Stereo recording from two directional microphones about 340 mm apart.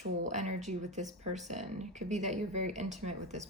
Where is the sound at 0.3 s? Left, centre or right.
Right.